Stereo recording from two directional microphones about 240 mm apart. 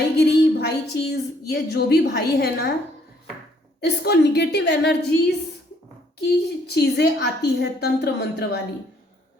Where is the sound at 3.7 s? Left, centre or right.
Left.